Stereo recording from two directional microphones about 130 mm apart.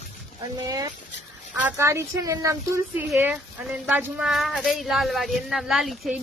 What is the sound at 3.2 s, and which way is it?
A woman's voice, 10° right (ahead or behind).